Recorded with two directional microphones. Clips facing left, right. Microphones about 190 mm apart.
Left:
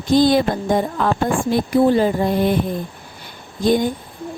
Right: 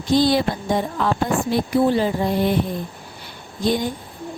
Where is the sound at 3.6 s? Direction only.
50° left (ahead or behind).